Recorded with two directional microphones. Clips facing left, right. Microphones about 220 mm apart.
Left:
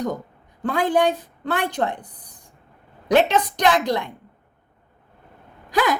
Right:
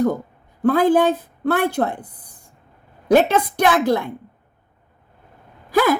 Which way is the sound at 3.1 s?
10° right (ahead or behind).